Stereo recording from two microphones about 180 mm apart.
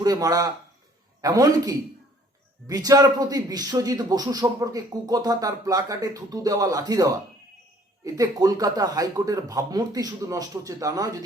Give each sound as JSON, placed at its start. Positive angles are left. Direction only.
{"t": 0.0, "sound": "speech", "side_deg": -20}